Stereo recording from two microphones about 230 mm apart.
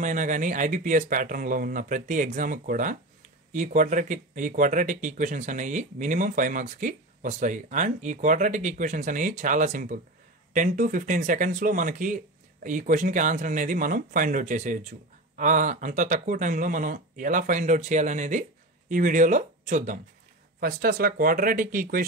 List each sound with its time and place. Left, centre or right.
0.0 s speech: right